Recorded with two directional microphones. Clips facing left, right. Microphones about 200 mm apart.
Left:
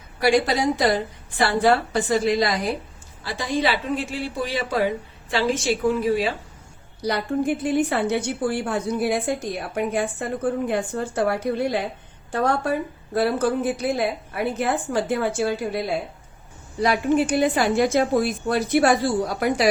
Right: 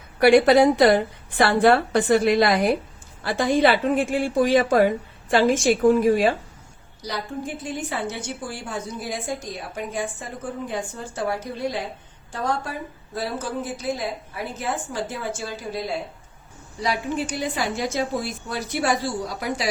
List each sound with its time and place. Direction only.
0.2 s a woman's voice: 60° right (ahead or behind)
7.0 s a woman's voice: 60° left (ahead or behind)
16.8 s a woman's voice: 55° left (ahead or behind)